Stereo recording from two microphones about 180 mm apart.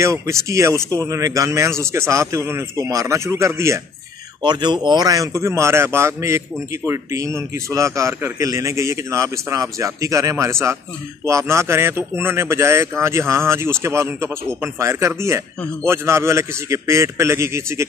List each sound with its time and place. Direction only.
0.0 s speech: 15° right (ahead or behind)